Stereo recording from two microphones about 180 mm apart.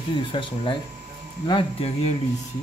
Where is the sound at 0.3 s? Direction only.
30° left (ahead or behind).